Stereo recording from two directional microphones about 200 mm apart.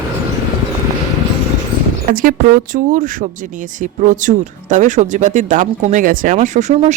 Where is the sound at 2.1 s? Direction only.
45° right (ahead or behind).